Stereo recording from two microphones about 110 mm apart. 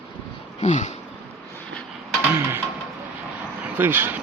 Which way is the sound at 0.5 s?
90° left.